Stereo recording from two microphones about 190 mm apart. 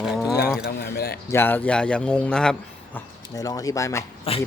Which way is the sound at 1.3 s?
10° left (ahead or behind).